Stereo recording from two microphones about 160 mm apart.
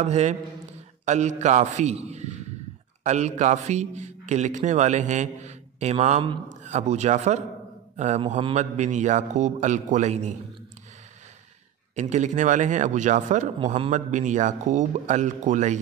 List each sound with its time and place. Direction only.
0.0 s a man's voice: 45° right (ahead or behind)
11.9 s speech: 50° right (ahead or behind)